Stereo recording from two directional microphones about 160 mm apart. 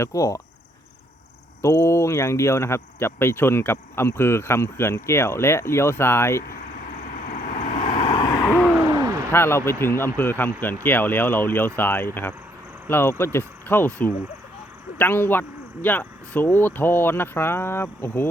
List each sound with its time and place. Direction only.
0.0 s speech: 20° left (ahead or behind)
1.6 s speech: 15° left (ahead or behind)
7.3 s vehicle: 45° left (ahead or behind)
8.0 s vehicle: 30° left (ahead or behind)
8.8 s a sound: 20° right (ahead or behind)
9.3 s speech: 15° left (ahead or behind)